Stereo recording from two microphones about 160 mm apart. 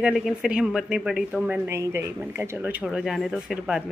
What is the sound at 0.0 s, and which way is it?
A woman's voice, 5° right (ahead or behind).